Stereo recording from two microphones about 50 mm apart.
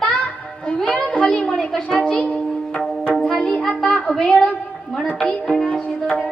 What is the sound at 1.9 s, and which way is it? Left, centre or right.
Music, centre.